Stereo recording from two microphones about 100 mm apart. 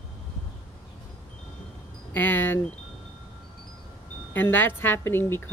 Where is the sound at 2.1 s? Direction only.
20° left (ahead or behind).